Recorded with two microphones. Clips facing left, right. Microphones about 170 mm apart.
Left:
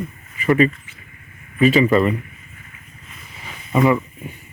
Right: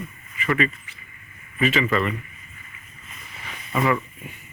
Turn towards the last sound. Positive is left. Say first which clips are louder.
# left 6 dB
turn(degrees=25)  # may be behind; listen again after turning